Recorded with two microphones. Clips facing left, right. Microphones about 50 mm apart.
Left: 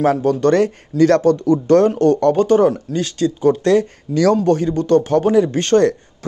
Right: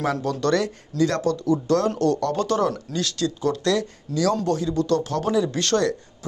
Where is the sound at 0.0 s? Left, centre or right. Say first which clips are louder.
Left 9 dB; left.